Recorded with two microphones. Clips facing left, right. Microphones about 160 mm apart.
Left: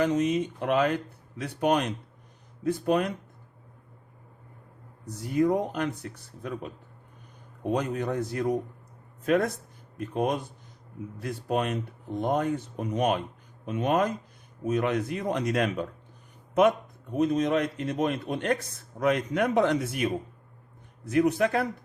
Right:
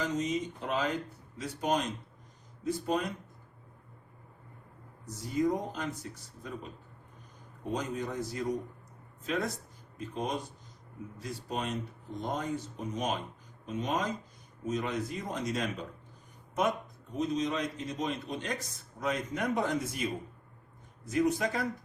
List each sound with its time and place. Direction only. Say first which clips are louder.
0.0 s speech: left 7 dB; 65° left (ahead or behind)
5.0 s speech: left 5 dB; 60° left (ahead or behind)
17.2 s a man's voice: left 7 dB; 60° left (ahead or behind)